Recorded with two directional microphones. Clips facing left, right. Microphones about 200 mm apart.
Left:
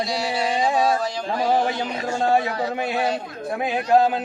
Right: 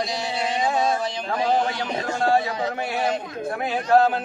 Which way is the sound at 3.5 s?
15° left (ahead or behind).